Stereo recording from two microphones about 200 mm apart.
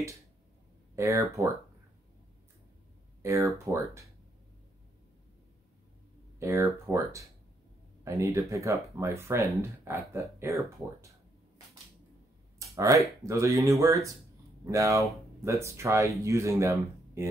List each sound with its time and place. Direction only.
0.9 s speech: 15° right (ahead or behind)
3.2 s speech: 15° right (ahead or behind)
6.4 s speech: 15° right (ahead or behind)
12.5 s speech: 15° right (ahead or behind)